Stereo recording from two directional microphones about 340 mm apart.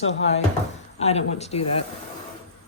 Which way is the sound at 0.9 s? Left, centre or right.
Centre.